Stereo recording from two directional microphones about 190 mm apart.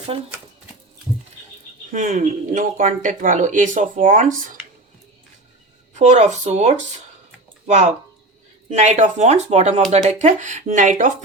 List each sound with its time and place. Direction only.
1.9 s speech: 40° right (ahead or behind)
5.9 s speech: 40° right (ahead or behind)
8.7 s speech: 40° right (ahead or behind)